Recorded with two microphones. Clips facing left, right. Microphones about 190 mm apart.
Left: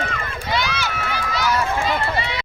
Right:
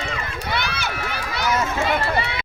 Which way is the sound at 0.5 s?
55° right (ahead or behind).